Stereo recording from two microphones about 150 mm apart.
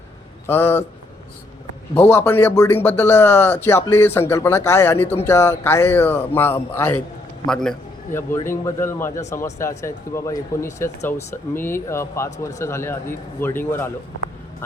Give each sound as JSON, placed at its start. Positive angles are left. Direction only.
{"t": 0.4, "sound": "speech", "side_deg": 15}
{"t": 2.0, "sound": "speech", "side_deg": 15}
{"t": 5.0, "sound": "speech", "side_deg": 50}
{"t": 5.3, "sound": "speech", "side_deg": 15}
{"t": 7.4, "sound": "a man's voice", "side_deg": 5}
{"t": 8.4, "sound": "speech", "side_deg": 15}